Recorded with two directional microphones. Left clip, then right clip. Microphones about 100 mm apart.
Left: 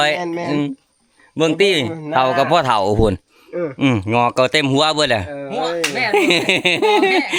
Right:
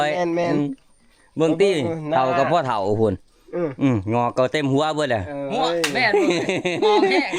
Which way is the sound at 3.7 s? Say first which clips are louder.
Left 6 dB; 35° left (ahead or behind).